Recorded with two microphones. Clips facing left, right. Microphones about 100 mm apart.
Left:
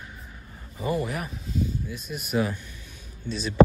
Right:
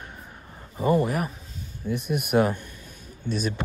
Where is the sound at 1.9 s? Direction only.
60° right (ahead or behind).